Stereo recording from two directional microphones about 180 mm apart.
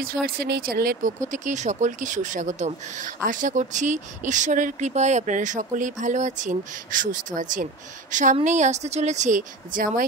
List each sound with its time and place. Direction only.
0.4 s speech: 60° right (ahead or behind)
1.3 s speech: 45° right (ahead or behind)